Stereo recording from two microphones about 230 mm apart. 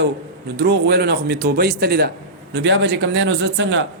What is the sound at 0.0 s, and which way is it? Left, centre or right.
A man's voice, right.